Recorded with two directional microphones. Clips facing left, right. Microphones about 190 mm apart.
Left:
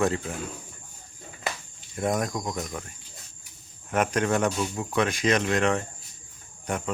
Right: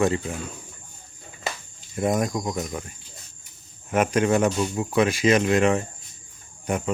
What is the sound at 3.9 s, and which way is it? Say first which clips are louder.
Speech: right 4 dB; 5° right (ahead or behind).